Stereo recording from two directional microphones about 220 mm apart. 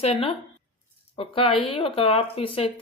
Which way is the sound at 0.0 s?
30° left (ahead or behind).